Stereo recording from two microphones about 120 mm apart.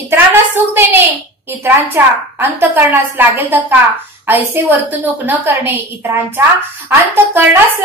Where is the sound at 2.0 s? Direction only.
20° right (ahead or behind).